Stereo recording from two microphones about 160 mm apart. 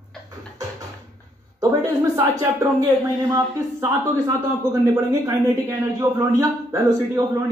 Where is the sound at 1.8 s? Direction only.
20° right (ahead or behind).